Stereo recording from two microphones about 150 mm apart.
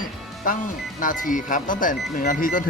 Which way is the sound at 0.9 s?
65° left (ahead or behind).